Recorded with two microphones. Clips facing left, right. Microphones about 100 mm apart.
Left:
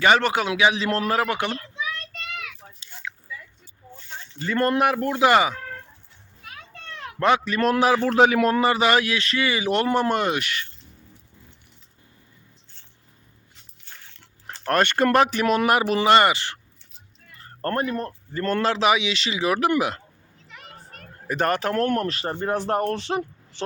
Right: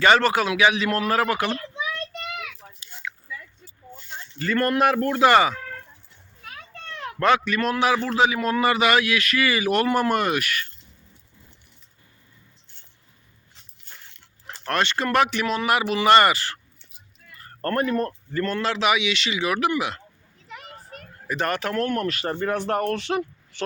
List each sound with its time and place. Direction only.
0.0 s a man's voice: 15° left (ahead or behind); by 1.1 s 30° left (ahead or behind)
1.1 s a man's voice: 20° left (ahead or behind)
4.4 s speech: 20° left (ahead or behind)
7.2 s a man's voice: 25° left (ahead or behind); by 7.9 s 40° left (ahead or behind)
8.1 s a man's voice: 55° left (ahead or behind)
8.5 s a man's voice: 35° left (ahead or behind)
14.7 s speech: 45° left (ahead or behind)
15.1 s speech: 35° left (ahead or behind)
16.0 s a man's voice: 20° left (ahead or behind)
17.6 s speech: 25° left (ahead or behind)
18.4 s speech: 40° left (ahead or behind)
20.5 s children playing: 5° right (ahead or behind)
21.2 s speech: 40° left (ahead or behind)